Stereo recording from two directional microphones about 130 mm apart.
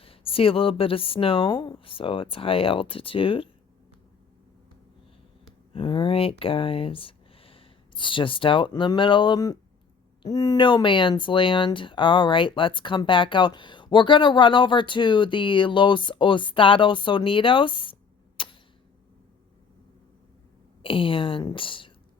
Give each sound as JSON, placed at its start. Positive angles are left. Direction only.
{"t": 0.0, "sound": "speech", "side_deg": 45}
{"t": 5.7, "sound": "speech", "side_deg": 40}
{"t": 18.4, "sound": "a sound", "side_deg": 40}
{"t": 20.8, "sound": "speech", "side_deg": 40}